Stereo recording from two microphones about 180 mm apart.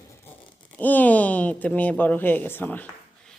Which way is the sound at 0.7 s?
10° left (ahead or behind).